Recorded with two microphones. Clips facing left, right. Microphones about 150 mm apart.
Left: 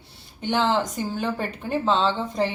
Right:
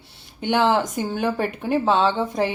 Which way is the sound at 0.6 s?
15° right (ahead or behind).